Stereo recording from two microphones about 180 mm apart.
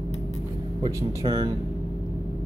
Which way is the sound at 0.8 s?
30° right (ahead or behind).